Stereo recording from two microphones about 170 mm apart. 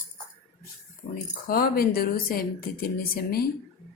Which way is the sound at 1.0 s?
55° left (ahead or behind).